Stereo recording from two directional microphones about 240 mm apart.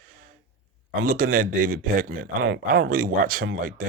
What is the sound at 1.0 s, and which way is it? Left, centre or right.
Speech, right.